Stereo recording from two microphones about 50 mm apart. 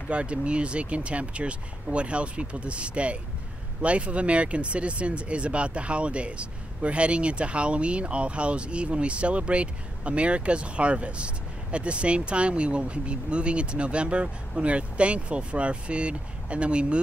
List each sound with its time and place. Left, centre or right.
0.1 s speech: right